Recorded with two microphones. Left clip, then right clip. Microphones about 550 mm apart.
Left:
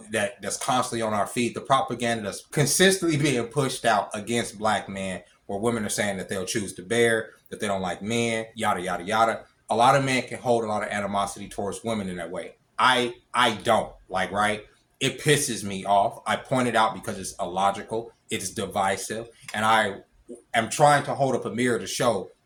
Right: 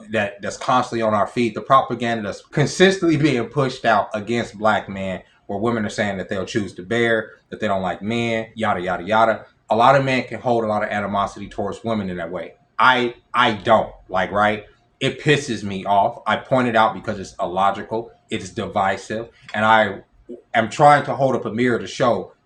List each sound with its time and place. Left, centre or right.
0.1 s speech: left